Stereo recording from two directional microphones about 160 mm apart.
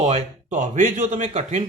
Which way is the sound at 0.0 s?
50° right (ahead or behind).